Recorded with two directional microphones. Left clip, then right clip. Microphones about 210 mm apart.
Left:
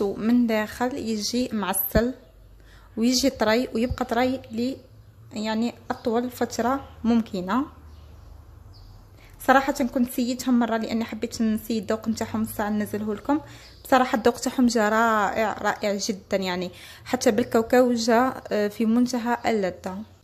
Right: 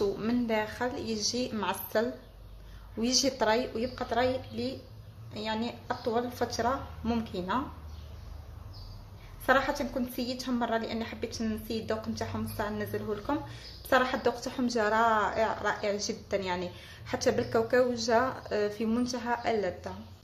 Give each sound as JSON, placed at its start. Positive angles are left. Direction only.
{"t": 0.0, "sound": "a woman's voice", "side_deg": 40}
{"t": 9.5, "sound": "a woman's voice", "side_deg": 50}